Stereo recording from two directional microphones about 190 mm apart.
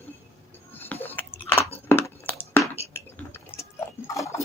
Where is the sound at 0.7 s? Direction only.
10° left (ahead or behind).